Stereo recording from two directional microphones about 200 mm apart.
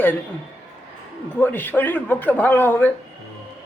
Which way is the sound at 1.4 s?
10° left (ahead or behind).